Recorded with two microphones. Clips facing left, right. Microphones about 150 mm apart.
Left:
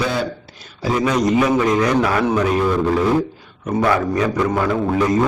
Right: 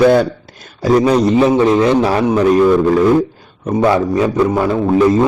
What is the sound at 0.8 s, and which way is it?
A man's voice, 35° right (ahead or behind).